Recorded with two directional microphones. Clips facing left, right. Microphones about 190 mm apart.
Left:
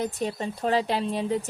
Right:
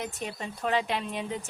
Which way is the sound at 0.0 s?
35° left (ahead or behind).